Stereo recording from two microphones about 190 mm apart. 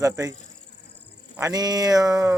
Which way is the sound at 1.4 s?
20° right (ahead or behind).